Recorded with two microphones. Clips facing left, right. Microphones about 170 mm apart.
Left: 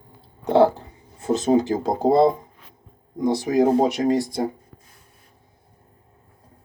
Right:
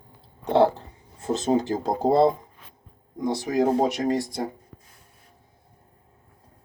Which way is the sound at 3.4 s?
10° left (ahead or behind).